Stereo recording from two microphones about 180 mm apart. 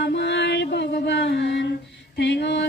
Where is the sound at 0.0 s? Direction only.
75° left (ahead or behind).